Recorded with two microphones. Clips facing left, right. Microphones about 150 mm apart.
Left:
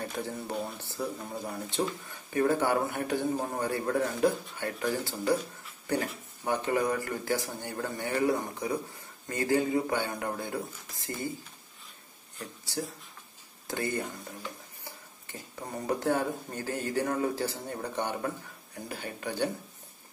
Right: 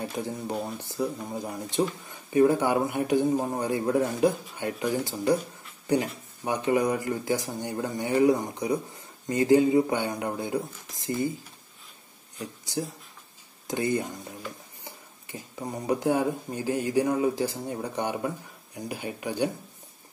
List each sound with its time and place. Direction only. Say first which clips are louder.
0.1 s speech: right 3 dB; 15° right (ahead or behind)
13.7 s speech: right 5 dB; 15° right (ahead or behind)